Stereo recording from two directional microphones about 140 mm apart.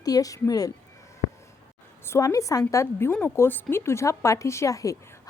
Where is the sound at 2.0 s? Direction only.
20° left (ahead or behind).